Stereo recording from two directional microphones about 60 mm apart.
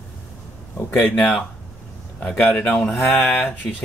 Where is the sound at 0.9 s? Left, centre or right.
Left.